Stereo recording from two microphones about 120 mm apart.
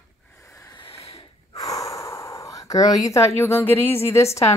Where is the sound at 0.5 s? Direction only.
25° left (ahead or behind).